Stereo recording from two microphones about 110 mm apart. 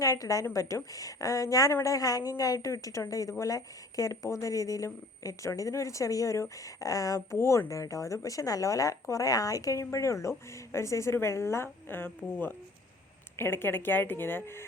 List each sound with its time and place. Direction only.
0.0 s a woman's voice: 35° left (ahead or behind)